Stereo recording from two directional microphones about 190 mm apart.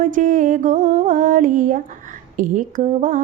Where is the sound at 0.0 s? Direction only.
40° right (ahead or behind).